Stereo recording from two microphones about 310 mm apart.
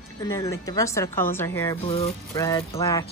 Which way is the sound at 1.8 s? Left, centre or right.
Centre.